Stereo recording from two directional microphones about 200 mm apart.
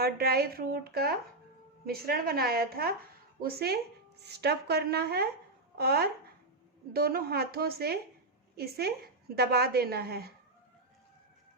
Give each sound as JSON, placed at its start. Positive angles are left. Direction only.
{"t": 0.0, "sound": "a woman's voice", "side_deg": -50}